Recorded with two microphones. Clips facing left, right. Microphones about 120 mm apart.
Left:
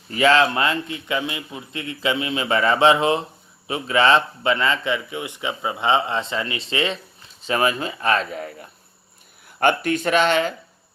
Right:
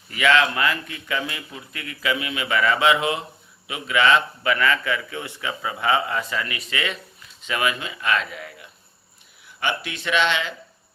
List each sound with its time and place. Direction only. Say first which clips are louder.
0.1 s a man's voice: left 3 dB; 30° left (ahead or behind)